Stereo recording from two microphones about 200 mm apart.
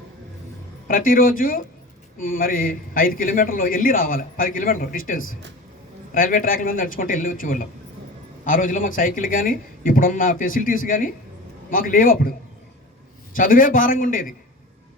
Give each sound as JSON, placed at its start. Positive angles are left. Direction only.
{"t": 0.9, "sound": "a man's voice", "side_deg": 45}
{"t": 13.3, "sound": "a man's voice", "side_deg": 45}